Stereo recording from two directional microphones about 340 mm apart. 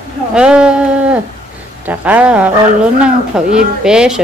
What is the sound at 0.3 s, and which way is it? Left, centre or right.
Speech, centre.